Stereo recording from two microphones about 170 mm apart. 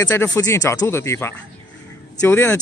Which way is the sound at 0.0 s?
15° left (ahead or behind).